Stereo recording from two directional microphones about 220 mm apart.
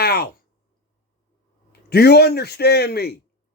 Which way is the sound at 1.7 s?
45° left (ahead or behind).